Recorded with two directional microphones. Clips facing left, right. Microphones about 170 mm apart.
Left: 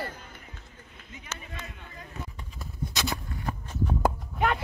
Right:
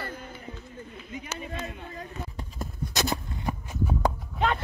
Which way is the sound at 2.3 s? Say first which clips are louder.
Right 6 dB; 45° right (ahead or behind).